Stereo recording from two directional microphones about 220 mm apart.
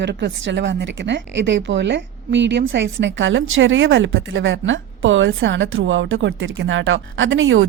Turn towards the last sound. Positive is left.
turn(degrees=-60)  # may be behind; listen again after turning